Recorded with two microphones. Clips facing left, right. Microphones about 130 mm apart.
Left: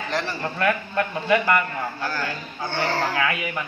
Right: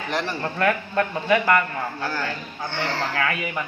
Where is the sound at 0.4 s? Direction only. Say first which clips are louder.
Right 1 dB; 5° left (ahead or behind).